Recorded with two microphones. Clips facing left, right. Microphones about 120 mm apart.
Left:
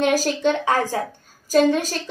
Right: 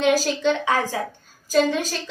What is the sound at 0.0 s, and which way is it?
A woman's voice, 45° left (ahead or behind).